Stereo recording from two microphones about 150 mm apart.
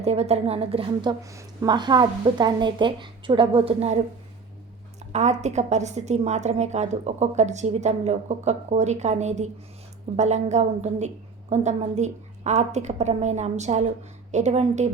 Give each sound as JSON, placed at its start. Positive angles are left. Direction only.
{"t": 0.0, "sound": "a woman's voice", "side_deg": -45}
{"t": 1.2, "sound": "a woman's voice", "side_deg": -20}
{"t": 5.1, "sound": "a woman's voice", "side_deg": -50}